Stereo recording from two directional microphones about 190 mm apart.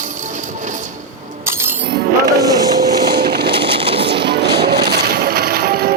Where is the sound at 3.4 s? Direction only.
25° right (ahead or behind).